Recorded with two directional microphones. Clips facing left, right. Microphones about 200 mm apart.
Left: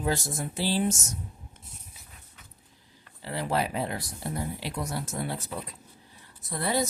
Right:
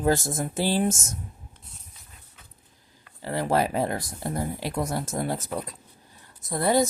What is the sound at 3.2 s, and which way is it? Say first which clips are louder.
Speech: right 5 dB; 45° right (ahead or behind).